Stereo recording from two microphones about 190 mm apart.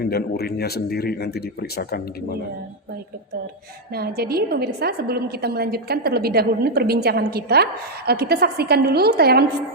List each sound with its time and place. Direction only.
0.0 s speech: 55° left (ahead or behind)
3.9 s a woman's voice: 55° right (ahead or behind)